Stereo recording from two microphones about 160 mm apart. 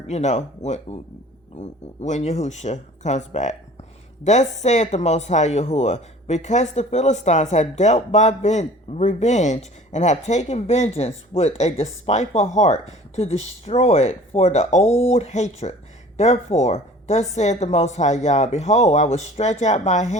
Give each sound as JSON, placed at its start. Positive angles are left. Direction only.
{"t": 0.1, "sound": "speech", "side_deg": 45}